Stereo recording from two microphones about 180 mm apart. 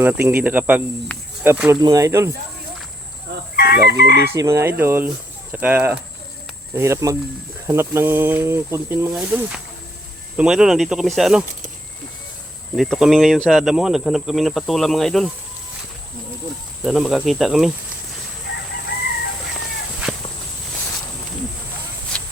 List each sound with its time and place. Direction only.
0.0 s speech: 10° right (ahead or behind)
1.1 s speech: 5° left (ahead or behind)
1.5 s speech: 10° right (ahead or behind)
3.5 s chicken: 60° left (ahead or behind)
4.0 s speech: 55° left (ahead or behind)
4.4 s speech: 15° right (ahead or behind)
12.7 s speech: centre (ahead or behind)
16.8 s speech: centre (ahead or behind)
20.0 s walk: 5° right (ahead or behind)